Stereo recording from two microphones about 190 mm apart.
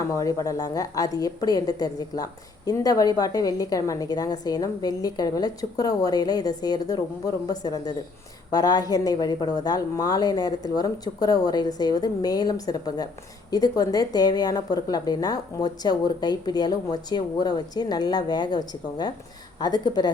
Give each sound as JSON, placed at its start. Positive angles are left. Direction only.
{"t": 0.2, "sound": "a woman's voice", "side_deg": 20}